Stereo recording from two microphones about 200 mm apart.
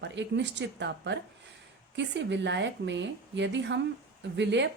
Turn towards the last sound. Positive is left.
turn(degrees=-60)  # may be behind; listen again after turning